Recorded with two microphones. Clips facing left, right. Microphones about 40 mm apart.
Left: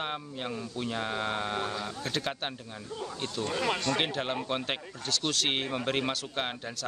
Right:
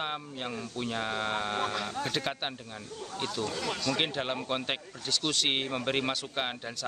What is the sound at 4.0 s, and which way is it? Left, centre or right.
Speech, centre.